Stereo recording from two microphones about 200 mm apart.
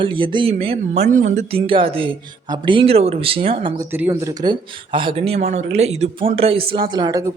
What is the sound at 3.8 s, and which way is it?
Speech, 10° right (ahead or behind).